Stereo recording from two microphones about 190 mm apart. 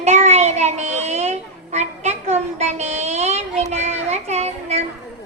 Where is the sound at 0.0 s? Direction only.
35° right (ahead or behind).